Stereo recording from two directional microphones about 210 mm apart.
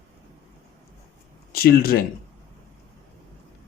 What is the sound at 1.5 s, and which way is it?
Speech, 45° left (ahead or behind).